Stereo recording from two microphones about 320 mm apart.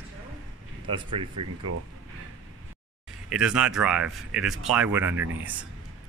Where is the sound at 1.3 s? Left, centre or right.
Right.